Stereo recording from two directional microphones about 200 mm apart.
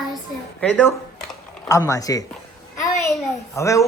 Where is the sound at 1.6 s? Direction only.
15° left (ahead or behind).